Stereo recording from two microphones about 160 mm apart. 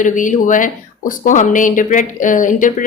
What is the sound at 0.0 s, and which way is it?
Speech, 55° left (ahead or behind).